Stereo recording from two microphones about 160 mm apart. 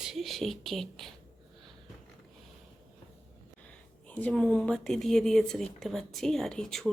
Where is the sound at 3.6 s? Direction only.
10° left (ahead or behind).